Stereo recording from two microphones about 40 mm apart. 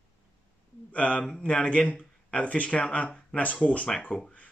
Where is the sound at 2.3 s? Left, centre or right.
Left.